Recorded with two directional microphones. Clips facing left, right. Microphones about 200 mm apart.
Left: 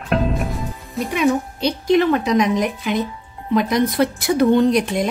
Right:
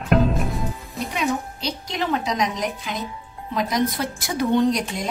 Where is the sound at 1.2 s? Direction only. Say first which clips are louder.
Left 7 dB; 60° left (ahead or behind).